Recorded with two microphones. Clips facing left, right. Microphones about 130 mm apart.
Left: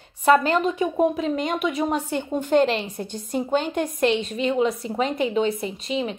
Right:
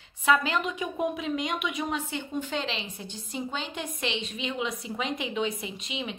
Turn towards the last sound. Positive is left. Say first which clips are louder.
# left 9 dB
turn(degrees=40)  # may be behind; listen again after turning